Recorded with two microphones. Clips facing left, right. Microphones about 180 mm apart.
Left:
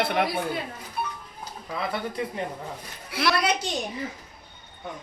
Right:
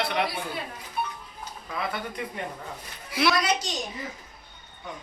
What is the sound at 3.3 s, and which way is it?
Speech, 60° left (ahead or behind).